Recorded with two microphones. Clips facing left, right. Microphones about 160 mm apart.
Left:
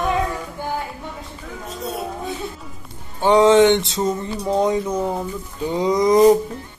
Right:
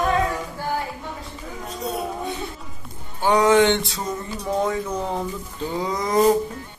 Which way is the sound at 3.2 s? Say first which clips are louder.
Left 4 dB; 20° left (ahead or behind).